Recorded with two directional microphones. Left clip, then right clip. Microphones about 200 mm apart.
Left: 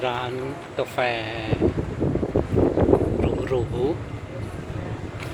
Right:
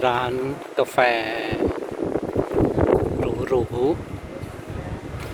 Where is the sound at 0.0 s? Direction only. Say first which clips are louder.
Right 5 dB; 35° right (ahead or behind).